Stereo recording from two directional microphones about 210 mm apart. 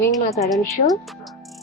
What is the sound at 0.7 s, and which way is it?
Speech, centre (ahead or behind).